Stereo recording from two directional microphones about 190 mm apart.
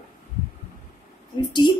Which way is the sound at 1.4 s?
25° left (ahead or behind).